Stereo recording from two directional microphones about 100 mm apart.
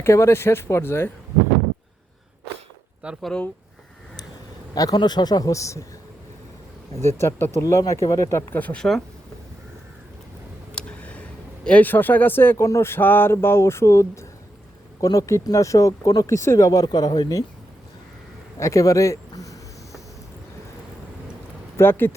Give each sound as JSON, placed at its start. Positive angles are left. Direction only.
{"t": 0.0, "sound": "speech", "side_deg": 25}
{"t": 3.2, "sound": "speech", "side_deg": 5}
{"t": 4.7, "sound": "speech", "side_deg": 40}
{"t": 6.9, "sound": "speech", "side_deg": 25}
{"t": 8.5, "sound": "speech", "side_deg": 15}
{"t": 10.8, "sound": "a sound", "side_deg": 10}
{"t": 11.6, "sound": "speech", "side_deg": 15}
{"t": 18.6, "sound": "a sound", "side_deg": 35}
{"t": 21.8, "sound": "speech", "side_deg": 20}